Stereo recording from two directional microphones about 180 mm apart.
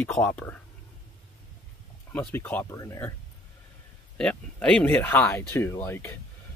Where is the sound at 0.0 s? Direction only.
10° left (ahead or behind).